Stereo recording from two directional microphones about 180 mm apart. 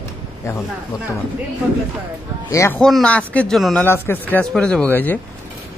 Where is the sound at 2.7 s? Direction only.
5° left (ahead or behind).